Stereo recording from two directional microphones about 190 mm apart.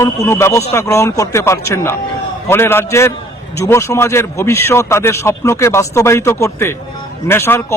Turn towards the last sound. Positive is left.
turn(degrees=15)  # may be behind; listen again after turning